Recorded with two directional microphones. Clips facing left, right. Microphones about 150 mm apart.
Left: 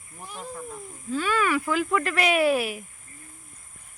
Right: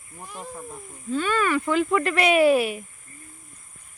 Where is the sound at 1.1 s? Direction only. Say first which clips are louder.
Right 1 dB; 5° left (ahead or behind).